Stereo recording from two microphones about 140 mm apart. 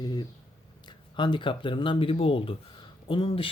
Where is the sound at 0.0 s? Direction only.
30° left (ahead or behind).